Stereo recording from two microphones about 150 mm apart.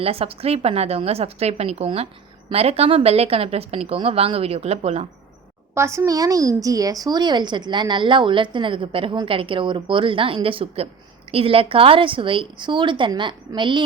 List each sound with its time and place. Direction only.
0.0 s a woman's voice: 40° right (ahead or behind)
5.7 s a woman's voice: 15° right (ahead or behind)